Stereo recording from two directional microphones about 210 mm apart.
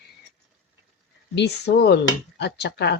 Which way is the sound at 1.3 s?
55° left (ahead or behind).